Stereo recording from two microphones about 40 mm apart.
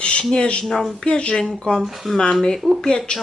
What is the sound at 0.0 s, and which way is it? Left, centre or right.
Speech, left.